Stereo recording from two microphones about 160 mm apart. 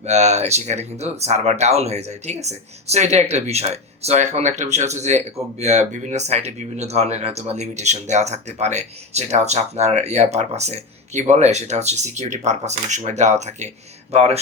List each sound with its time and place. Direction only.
0.0 s speech: 45° right (ahead or behind)